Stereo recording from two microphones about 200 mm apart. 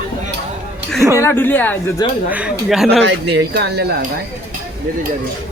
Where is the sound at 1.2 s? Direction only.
10° left (ahead or behind).